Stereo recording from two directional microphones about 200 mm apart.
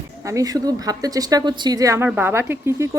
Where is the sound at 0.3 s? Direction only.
15° right (ahead or behind).